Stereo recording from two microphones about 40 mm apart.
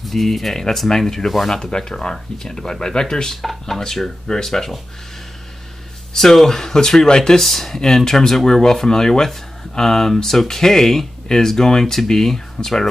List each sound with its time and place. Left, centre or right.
0.0 s speech: centre
3.4 s speech: centre
6.1 s speech: centre